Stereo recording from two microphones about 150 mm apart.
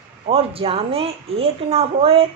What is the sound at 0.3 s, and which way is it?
Speech, 40° right (ahead or behind).